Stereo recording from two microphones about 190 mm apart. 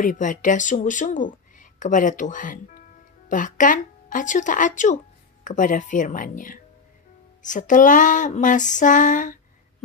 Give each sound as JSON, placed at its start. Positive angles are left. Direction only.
{"t": 0.0, "sound": "speech", "side_deg": 45}